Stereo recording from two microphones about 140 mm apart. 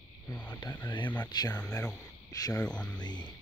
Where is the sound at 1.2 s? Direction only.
30° left (ahead or behind).